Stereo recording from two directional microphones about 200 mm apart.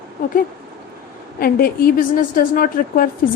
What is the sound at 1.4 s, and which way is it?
A woman's voice, 50° left (ahead or behind).